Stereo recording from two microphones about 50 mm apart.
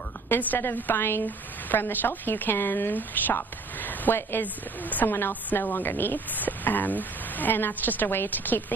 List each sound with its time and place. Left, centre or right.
0.3 s a woman's voice: left
5.0 s a woman's voice: left